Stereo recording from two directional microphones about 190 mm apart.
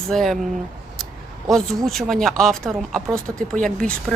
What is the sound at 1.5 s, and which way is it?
A woman's voice, centre (ahead or behind).